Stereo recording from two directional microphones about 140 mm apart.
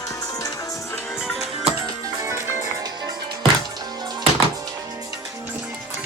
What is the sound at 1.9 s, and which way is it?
Music, 25° right (ahead or behind).